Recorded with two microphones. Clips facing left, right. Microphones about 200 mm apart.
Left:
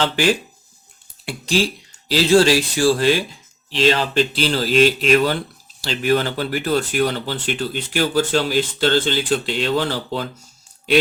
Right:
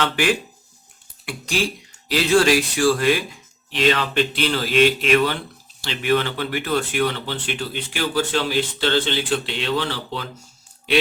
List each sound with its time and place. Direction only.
0.0 s speech: 30° left (ahead or behind); by 10.2 s 45° left (ahead or behind)